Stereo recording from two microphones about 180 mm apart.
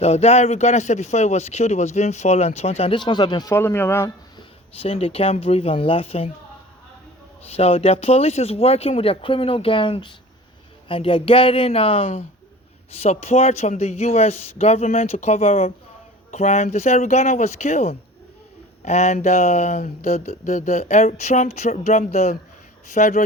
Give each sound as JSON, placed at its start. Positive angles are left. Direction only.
{"t": 0.0, "sound": "speech", "side_deg": 35}
{"t": 3.5, "sound": "a man's voice", "side_deg": 15}
{"t": 4.4, "sound": "speech", "side_deg": 30}
{"t": 7.5, "sound": "speech", "side_deg": 35}